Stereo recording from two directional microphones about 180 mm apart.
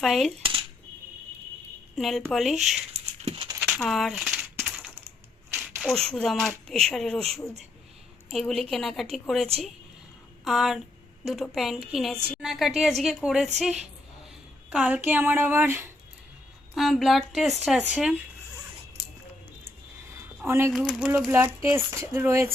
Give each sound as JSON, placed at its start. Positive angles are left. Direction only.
{"t": 0.0, "sound": "speech", "side_deg": 0}
{"t": 2.0, "sound": "speech", "side_deg": 0}
{"t": 3.2, "sound": "a sound", "side_deg": -30}
{"t": 3.6, "sound": "speech", "side_deg": 0}
{"t": 4.6, "sound": "crushing", "side_deg": -5}
{"t": 5.5, "sound": "a sound", "side_deg": -10}
{"t": 5.8, "sound": "speech", "side_deg": 5}
{"t": 16.7, "sound": "speech", "side_deg": 0}
{"t": 20.5, "sound": "speech", "side_deg": -15}
{"t": 20.7, "sound": "speech", "side_deg": -5}